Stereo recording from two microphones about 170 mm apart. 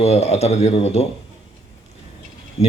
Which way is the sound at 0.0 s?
35° left (ahead or behind).